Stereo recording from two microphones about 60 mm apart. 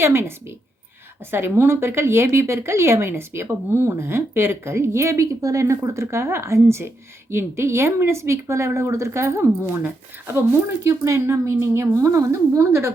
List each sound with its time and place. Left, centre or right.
0.0 s speech: right
10.8 s speech: right